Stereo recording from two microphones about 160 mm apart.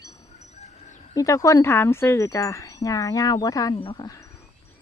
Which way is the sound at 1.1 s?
20° left (ahead or behind).